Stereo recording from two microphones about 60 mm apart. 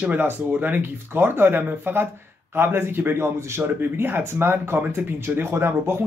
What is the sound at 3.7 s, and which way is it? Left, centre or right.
Speech, right.